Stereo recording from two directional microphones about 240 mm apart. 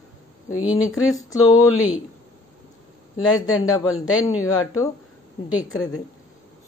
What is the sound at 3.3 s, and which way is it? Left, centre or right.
A woman's voice, centre.